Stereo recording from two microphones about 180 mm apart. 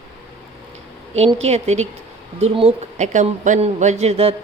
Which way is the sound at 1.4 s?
35° right (ahead or behind).